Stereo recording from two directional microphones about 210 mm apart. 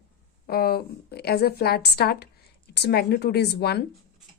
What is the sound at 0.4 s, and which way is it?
A woman's voice, 45° left (ahead or behind).